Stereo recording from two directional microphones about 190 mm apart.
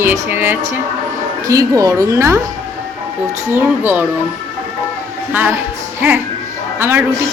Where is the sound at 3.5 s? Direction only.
10° right (ahead or behind).